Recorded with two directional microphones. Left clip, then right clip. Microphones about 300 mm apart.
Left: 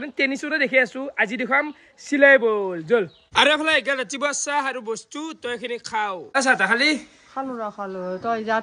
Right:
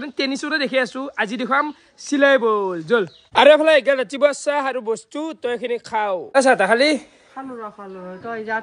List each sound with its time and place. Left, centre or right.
0.0 s a man's voice: centre
7.5 s speech: centre